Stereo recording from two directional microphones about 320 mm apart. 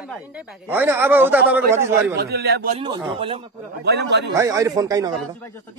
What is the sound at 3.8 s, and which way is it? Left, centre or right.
Speech, right.